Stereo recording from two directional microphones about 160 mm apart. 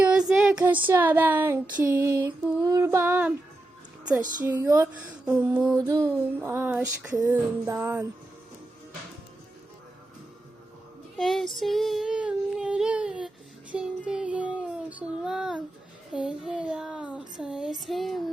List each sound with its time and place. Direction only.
0.0 s a sound: 5° right (ahead or behind)
0.6 s female singing: 10° right (ahead or behind)
4.4 s speech: 15° right (ahead or behind)
5.0 s female singing: 10° right (ahead or behind)
11.2 s child singing: centre (ahead or behind)